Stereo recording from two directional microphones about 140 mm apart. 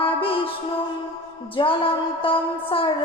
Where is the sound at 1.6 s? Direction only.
30° left (ahead or behind).